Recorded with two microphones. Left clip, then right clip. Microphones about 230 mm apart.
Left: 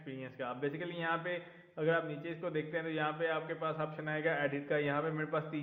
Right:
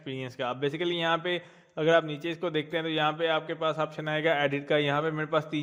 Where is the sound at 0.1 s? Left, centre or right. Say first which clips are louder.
Right 9 dB; right.